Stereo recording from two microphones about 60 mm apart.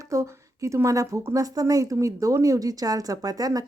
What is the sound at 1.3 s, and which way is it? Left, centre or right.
Speech, right.